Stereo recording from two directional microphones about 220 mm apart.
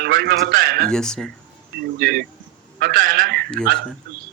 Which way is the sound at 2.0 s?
40° right (ahead or behind).